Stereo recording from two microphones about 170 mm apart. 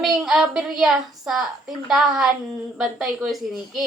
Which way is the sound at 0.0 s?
Centre (ahead or behind).